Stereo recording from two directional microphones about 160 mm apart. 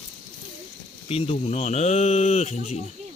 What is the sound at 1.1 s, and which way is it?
Speech, 40° left (ahead or behind).